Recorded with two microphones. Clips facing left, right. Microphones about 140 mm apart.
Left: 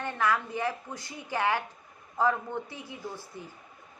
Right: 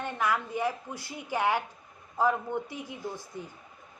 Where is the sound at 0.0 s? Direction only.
15° right (ahead or behind).